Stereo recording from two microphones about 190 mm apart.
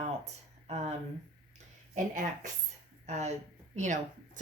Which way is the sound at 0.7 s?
35° right (ahead or behind).